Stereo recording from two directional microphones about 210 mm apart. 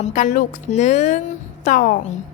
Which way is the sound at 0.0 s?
35° left (ahead or behind).